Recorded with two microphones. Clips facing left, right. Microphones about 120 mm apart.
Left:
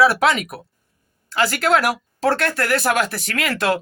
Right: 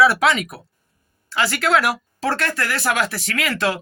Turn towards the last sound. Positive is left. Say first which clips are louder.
# left 2 dB
turn(degrees=50)  # may be behind; listen again after turning